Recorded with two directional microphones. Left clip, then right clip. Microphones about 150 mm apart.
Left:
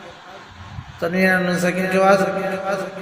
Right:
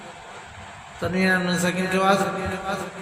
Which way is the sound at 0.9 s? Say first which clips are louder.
Left 4 dB; 35° left (ahead or behind).